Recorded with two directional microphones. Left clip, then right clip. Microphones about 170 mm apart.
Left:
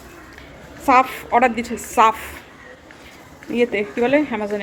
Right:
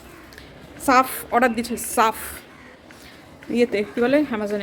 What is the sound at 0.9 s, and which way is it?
A woman's voice, 20° right (ahead or behind).